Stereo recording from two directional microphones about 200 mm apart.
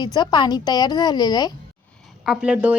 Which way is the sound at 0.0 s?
20° left (ahead or behind).